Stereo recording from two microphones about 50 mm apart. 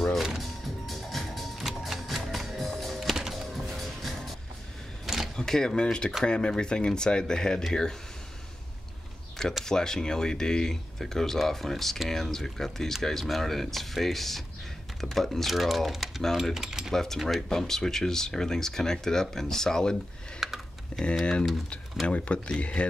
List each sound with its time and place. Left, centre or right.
0.2 s music: centre
5.0 s camera: centre
5.3 s speech: centre
9.7 s speech: centre
16.5 s speech: centre
16.9 s speech: centre
20.4 s a sound: centre
20.9 s speech: centre